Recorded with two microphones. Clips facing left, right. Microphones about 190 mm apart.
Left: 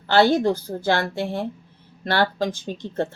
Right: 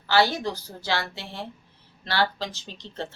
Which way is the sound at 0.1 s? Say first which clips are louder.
Left 6 dB; 55° left (ahead or behind).